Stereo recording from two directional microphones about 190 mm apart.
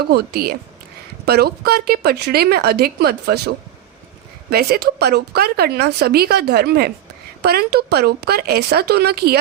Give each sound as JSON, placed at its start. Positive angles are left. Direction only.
{"t": 0.0, "sound": "speech", "side_deg": -55}